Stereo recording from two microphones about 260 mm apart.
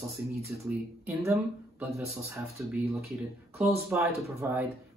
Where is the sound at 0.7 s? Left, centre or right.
Centre.